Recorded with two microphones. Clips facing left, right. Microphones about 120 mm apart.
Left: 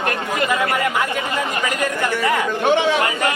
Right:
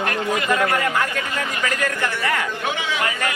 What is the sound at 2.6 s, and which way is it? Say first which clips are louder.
Speech: left 9 dB; 35° left (ahead or behind).